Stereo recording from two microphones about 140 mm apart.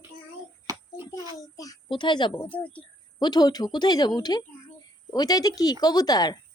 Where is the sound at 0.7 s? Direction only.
25° right (ahead or behind).